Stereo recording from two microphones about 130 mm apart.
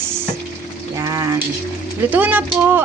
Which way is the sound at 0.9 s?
25° right (ahead or behind).